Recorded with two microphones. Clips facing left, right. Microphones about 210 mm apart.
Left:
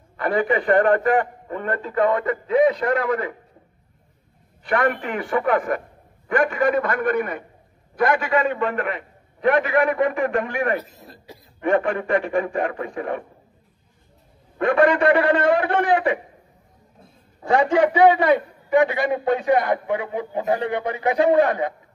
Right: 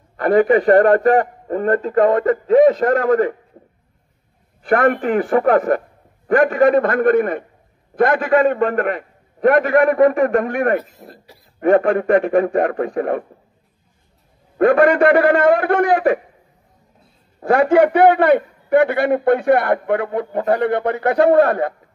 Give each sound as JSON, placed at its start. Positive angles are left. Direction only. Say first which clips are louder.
{"t": 0.2, "sound": "a man's voice", "louder": "right 8 dB", "side_deg": -40}
{"t": 4.6, "sound": "a man's voice", "louder": "right 6 dB", "side_deg": -45}
{"t": 10.9, "sound": "speech", "louder": "right 2 dB", "side_deg": 20}
{"t": 11.7, "sound": "a man's voice", "louder": "right 6 dB", "side_deg": -40}
{"t": 15.0, "sound": "a man's voice", "louder": "right 5 dB", "side_deg": -40}
{"t": 17.4, "sound": "a man's voice", "louder": "right 5 dB", "side_deg": -60}